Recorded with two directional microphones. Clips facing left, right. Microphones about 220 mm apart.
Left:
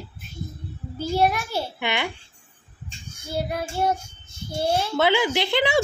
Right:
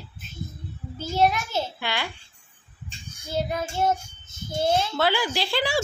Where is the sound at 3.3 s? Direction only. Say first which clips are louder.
Even; 10° left (ahead or behind).